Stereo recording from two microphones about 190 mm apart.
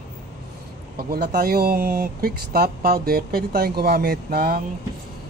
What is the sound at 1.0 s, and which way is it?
Speech, 55° right (ahead or behind).